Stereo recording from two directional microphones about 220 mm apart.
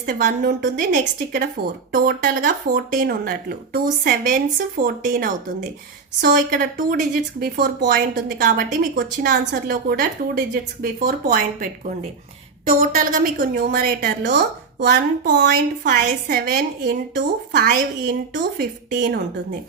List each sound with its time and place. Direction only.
0.0 s a woman's voice: 40° right (ahead or behind)